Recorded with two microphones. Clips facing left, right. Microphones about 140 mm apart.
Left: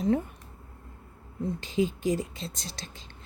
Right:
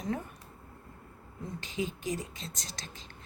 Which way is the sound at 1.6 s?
30° left (ahead or behind).